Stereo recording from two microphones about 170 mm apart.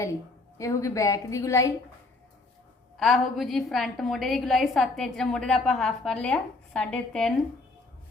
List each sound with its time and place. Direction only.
0.6 s a woman's voice: 20° left (ahead or behind)
3.0 s a woman's voice: centre (ahead or behind)